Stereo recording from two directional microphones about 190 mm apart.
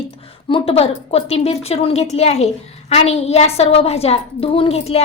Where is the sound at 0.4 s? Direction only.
30° left (ahead or behind).